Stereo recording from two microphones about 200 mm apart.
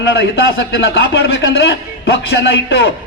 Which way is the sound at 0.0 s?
60° left (ahead or behind).